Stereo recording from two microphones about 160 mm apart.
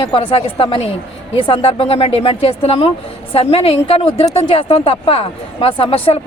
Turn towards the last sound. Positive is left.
turn(degrees=35)  # may be behind; listen again after turning